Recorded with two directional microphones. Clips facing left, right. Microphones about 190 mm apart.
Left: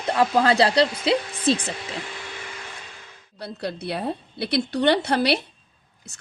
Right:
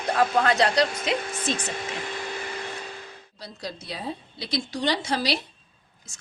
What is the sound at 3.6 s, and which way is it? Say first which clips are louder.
A woman's voice: left 6 dB; 60° left (ahead or behind).